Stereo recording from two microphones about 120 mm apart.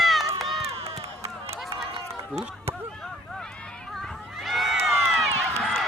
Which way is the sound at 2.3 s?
5° right (ahead or behind).